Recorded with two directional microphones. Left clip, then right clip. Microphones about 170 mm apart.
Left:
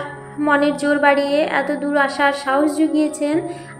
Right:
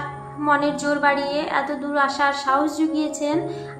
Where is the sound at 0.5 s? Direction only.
15° left (ahead or behind).